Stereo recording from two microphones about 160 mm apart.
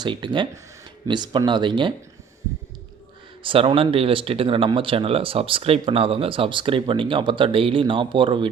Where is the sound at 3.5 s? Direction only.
35° right (ahead or behind).